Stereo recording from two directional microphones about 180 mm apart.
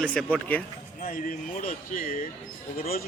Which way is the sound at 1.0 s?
45° left (ahead or behind).